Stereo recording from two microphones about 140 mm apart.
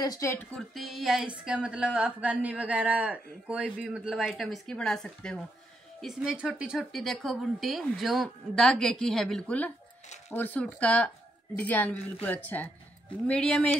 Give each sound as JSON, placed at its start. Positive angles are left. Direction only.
{"t": 0.0, "sound": "speech", "side_deg": 25}
{"t": 0.6, "sound": "a woman's voice", "side_deg": 0}